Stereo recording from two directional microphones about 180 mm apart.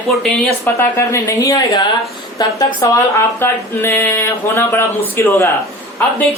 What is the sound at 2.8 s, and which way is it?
Speech, 20° left (ahead or behind).